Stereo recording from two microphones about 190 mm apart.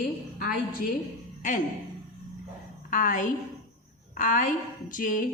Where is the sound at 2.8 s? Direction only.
45° left (ahead or behind).